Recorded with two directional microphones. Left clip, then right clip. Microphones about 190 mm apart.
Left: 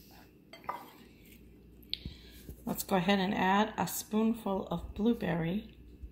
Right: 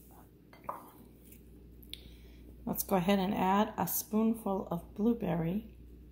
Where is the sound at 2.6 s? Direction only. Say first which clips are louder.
Even; centre (ahead or behind).